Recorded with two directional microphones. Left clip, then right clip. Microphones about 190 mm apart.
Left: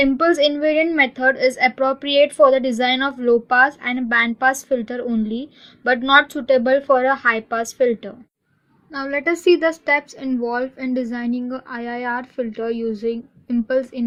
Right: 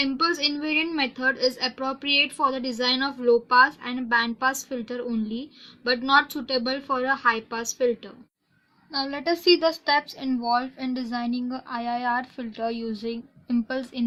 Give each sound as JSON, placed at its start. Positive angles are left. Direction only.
{"t": 0.0, "sound": "a woman's voice", "side_deg": 20}
{"t": 8.9, "sound": "a woman's voice", "side_deg": 5}